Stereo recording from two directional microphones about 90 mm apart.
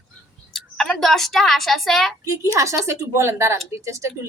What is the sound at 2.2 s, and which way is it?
Speech, 35° right (ahead or behind).